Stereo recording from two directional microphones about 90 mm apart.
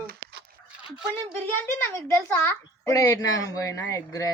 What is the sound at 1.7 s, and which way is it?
Speech, 25° left (ahead or behind).